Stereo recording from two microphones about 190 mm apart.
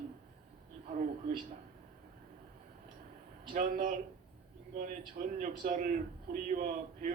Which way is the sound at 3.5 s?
45° right (ahead or behind).